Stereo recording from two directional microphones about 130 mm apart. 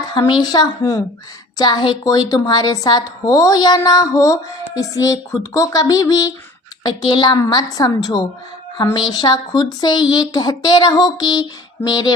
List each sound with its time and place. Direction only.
0.3 s speech: 30° left (ahead or behind)